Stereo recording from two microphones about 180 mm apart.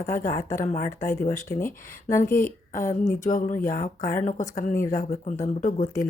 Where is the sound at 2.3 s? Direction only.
50° left (ahead or behind).